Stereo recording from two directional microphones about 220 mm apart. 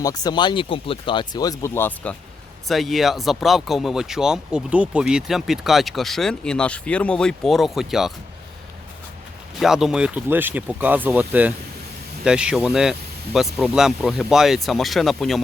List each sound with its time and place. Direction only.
0.0 s speech: 15° left (ahead or behind); by 8.1 s centre (ahead or behind)
9.6 s speech: centre (ahead or behind)